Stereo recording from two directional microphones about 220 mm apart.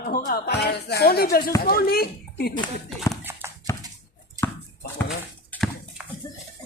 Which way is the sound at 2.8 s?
Centre (ahead or behind).